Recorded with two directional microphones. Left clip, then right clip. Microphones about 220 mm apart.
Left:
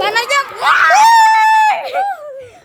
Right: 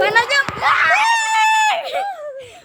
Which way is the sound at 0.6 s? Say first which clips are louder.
Left 5 dB; 35° left (ahead or behind).